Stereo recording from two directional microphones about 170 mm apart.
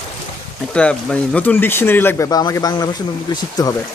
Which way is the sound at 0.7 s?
5° left (ahead or behind).